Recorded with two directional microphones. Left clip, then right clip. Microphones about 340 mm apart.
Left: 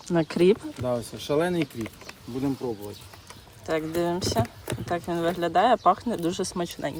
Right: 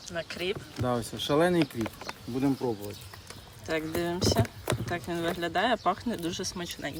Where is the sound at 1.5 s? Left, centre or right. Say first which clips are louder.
Right 1 dB; centre.